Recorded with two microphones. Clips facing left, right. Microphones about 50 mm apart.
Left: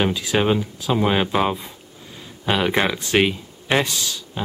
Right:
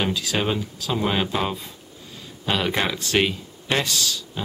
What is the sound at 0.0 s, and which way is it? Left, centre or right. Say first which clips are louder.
Speech: left 4 dB; centre.